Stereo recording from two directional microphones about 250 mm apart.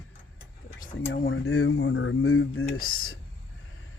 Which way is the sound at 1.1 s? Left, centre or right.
Left.